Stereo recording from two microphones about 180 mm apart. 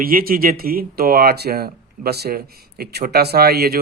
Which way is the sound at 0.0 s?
55° right (ahead or behind).